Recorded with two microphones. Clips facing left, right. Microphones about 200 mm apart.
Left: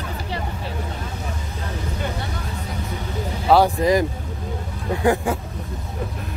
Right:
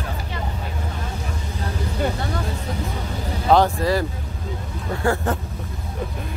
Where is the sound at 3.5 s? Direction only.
15° left (ahead or behind).